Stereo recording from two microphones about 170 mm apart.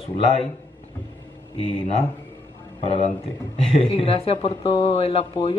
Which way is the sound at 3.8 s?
35° left (ahead or behind).